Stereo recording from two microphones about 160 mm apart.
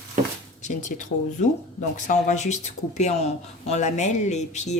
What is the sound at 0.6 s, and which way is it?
Speech, 50° left (ahead or behind).